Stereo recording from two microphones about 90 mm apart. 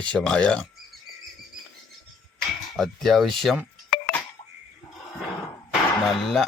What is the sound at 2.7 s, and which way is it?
Speech, 5° left (ahead or behind).